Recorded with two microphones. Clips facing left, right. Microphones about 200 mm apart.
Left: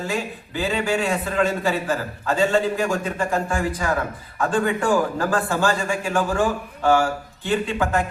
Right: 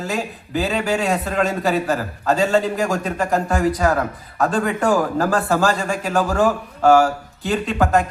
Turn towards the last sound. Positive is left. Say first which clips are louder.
# right 4 dB
turn(degrees=-40)  # may be behind; listen again after turning